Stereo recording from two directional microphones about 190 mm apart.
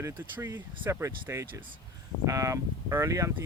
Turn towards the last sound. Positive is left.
turn(degrees=-15)  # may be behind; listen again after turning